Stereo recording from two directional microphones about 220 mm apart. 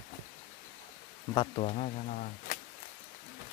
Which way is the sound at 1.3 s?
25° left (ahead or behind).